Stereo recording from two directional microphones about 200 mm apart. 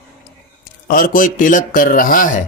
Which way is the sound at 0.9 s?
45° left (ahead or behind).